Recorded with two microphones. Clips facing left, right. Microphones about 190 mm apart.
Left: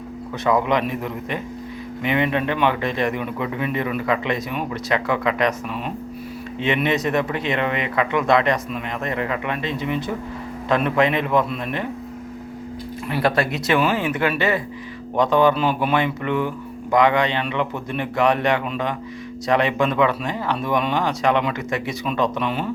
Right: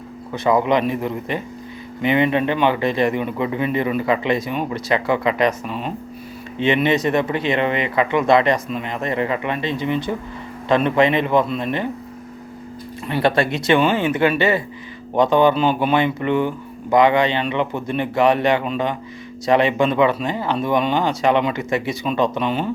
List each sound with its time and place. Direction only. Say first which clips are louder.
0.4 s speech: right 3 dB; centre (ahead or behind)
5.6 s speech: right 2 dB; 30° right (ahead or behind)
6.6 s speech: right 4 dB; centre (ahead or behind)
13.1 s speech: right 3 dB; 5° left (ahead or behind)